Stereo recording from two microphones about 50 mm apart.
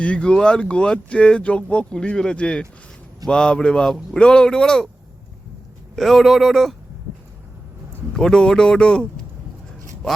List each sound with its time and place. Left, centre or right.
0.2 s speech: centre
6.0 s speech: centre
8.1 s speech: centre